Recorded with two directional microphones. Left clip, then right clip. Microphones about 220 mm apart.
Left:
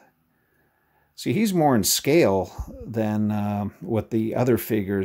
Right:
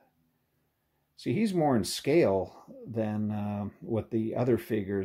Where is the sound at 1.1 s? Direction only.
30° left (ahead or behind).